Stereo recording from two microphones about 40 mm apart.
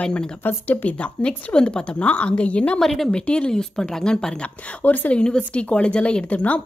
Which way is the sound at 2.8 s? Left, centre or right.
Centre.